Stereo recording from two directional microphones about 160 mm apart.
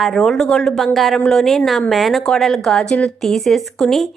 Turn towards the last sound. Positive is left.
turn(degrees=0)  # may be behind; listen again after turning